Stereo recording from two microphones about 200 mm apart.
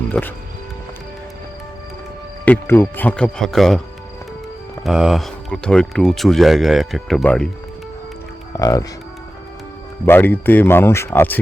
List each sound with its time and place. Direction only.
0.1 s speech: 10° left (ahead or behind)
2.4 s speech: 10° left (ahead or behind)
4.9 s speech: centre (ahead or behind)
8.5 s cattle: 15° left (ahead or behind)
10.1 s speech: 10° left (ahead or behind)